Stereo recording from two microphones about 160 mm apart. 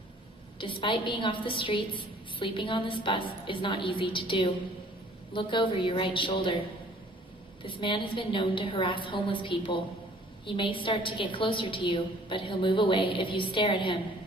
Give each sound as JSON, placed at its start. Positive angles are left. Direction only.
{"t": 0.6, "sound": "a woman's voice", "side_deg": 30}
{"t": 7.6, "sound": "a woman's voice", "side_deg": 30}